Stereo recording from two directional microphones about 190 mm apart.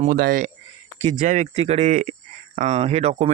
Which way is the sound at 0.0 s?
50° right (ahead or behind).